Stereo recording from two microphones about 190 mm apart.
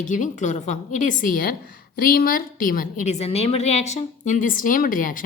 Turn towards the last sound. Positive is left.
turn(degrees=45)  # may be behind; listen again after turning